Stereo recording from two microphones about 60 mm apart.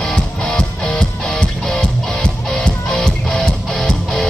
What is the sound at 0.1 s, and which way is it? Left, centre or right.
Music, centre.